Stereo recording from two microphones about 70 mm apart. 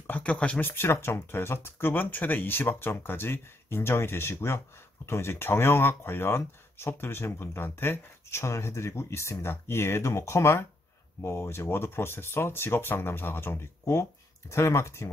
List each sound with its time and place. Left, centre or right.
0.0 s speech: left
0.7 s speech: left